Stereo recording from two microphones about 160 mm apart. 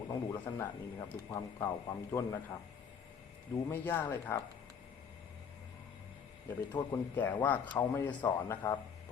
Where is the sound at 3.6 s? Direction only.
15° left (ahead or behind).